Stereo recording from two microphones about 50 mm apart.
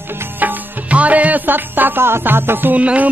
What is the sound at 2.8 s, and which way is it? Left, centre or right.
Music, right.